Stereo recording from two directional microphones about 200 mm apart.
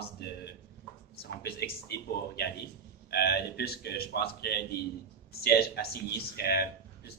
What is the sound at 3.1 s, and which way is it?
A man's voice, 55° left (ahead or behind).